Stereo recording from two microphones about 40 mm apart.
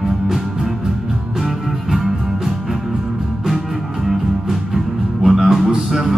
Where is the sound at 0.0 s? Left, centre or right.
Centre.